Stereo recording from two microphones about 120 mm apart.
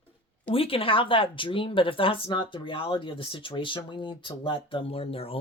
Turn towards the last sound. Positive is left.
turn(degrees=55)  # may be behind; listen again after turning